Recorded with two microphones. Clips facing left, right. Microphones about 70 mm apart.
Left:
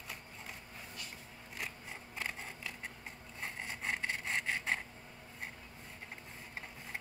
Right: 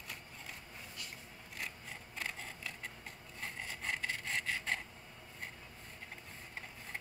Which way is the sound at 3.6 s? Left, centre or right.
Left.